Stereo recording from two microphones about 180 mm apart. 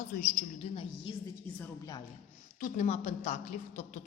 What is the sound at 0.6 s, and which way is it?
Speech, 35° left (ahead or behind).